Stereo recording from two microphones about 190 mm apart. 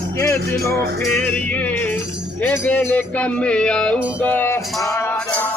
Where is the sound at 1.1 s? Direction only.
10° left (ahead or behind).